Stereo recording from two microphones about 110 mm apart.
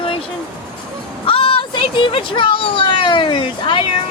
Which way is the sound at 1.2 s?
55° left (ahead or behind).